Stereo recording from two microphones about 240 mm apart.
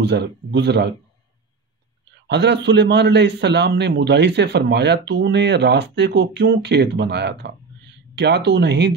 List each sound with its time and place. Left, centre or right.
0.0 s a man's voice: right
2.2 s a man's voice: right